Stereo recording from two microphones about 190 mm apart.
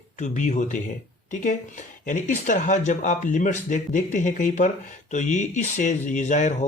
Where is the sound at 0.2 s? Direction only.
40° left (ahead or behind).